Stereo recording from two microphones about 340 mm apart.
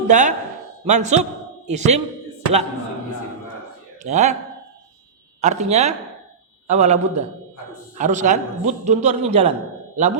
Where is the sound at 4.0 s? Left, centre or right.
Right.